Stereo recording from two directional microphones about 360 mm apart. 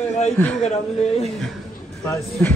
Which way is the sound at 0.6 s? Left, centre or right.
Centre.